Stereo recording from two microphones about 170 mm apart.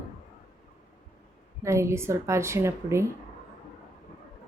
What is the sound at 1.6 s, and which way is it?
A woman's voice, 15° right (ahead or behind).